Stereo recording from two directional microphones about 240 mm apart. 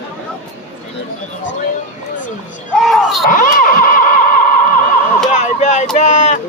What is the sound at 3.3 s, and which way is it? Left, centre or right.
Vehicle, left.